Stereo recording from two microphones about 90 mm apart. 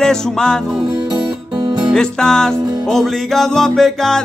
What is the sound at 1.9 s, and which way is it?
Music, 5° left (ahead or behind).